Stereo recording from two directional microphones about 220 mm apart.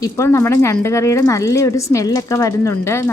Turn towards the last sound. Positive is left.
turn(degrees=10)  # may be behind; listen again after turning